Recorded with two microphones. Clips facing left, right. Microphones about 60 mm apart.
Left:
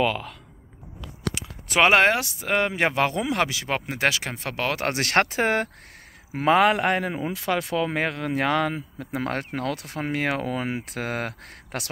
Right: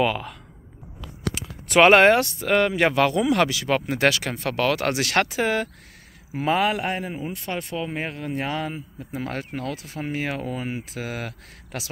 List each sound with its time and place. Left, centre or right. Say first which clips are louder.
0.0 s speech: right 1 dB; centre
4.8 s speech: even; left
6.3 s speech: left 3 dB; left